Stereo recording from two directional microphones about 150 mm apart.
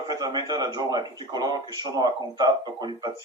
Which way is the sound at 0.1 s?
25° right (ahead or behind).